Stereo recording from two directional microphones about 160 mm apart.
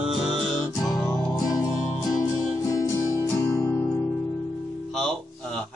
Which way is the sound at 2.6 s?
20° left (ahead or behind).